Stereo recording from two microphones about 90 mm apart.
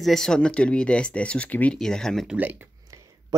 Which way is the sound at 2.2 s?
20° right (ahead or behind).